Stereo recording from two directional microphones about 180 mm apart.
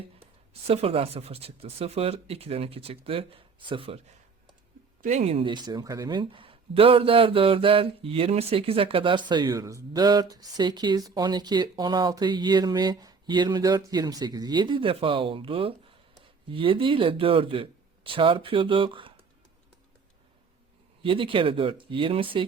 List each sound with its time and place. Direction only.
0.7 s speech: 30° right (ahead or behind)
5.0 s speech: 40° right (ahead or behind)
21.0 s speech: 30° right (ahead or behind)